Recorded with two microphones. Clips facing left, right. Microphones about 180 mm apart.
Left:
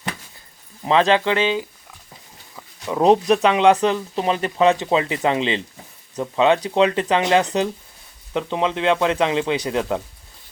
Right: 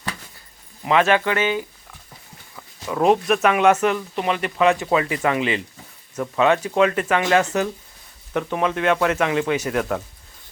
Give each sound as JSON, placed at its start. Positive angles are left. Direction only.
{"t": 1.0, "sound": "speech", "side_deg": 25}
{"t": 2.9, "sound": "speech", "side_deg": 25}
{"t": 3.8, "sound": "speech", "side_deg": 30}